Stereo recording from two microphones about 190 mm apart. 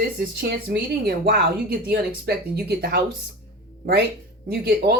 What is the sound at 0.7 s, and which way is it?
Speech, 55° right (ahead or behind).